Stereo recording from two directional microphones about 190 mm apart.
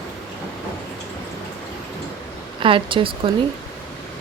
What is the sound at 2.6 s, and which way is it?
Speech, 25° right (ahead or behind).